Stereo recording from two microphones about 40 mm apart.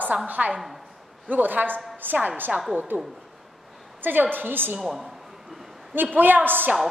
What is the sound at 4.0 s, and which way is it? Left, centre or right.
Speech, right.